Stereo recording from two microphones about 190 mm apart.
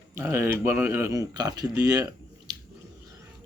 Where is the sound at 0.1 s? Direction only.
15° right (ahead or behind).